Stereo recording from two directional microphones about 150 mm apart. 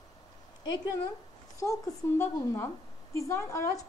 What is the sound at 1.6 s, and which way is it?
A woman's voice, 20° left (ahead or behind).